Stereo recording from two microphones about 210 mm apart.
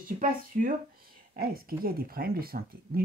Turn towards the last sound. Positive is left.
turn(degrees=-45)  # may be behind; listen again after turning